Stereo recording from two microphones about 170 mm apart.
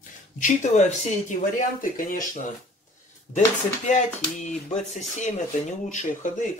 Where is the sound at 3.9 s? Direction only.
45° left (ahead or behind).